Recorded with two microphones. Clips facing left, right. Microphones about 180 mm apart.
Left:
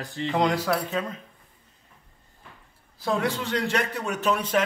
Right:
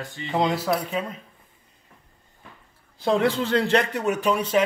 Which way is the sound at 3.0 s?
25° right (ahead or behind).